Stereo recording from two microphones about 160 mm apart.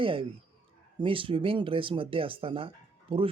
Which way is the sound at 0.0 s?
35° right (ahead or behind).